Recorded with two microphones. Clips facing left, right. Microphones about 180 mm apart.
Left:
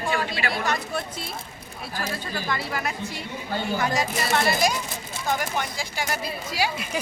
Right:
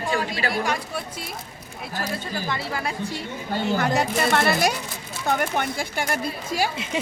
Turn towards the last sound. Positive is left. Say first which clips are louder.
# right 2 dB
turn(degrees=-25)  # may be behind; listen again after turning